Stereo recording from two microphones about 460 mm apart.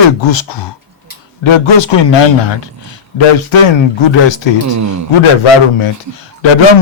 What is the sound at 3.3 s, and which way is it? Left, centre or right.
Speech, left.